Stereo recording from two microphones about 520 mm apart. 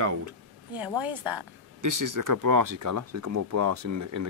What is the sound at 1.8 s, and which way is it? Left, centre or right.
Speech, right.